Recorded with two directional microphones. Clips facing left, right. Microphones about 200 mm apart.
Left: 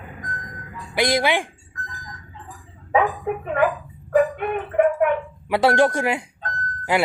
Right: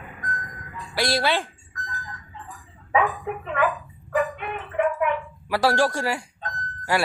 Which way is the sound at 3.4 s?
45° left (ahead or behind).